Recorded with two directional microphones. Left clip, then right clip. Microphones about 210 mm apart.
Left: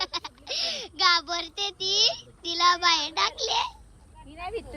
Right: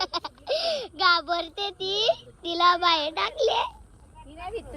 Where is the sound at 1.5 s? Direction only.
35° left (ahead or behind).